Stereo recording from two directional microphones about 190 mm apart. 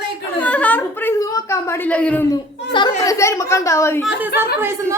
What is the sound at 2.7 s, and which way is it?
Speech, 25° left (ahead or behind).